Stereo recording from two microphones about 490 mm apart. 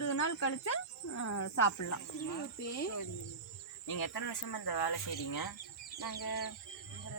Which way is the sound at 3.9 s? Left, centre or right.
Left.